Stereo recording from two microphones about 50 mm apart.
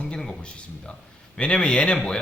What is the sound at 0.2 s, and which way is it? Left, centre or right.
Speech, centre.